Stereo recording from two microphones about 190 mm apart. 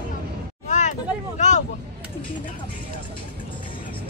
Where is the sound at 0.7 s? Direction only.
40° left (ahead or behind).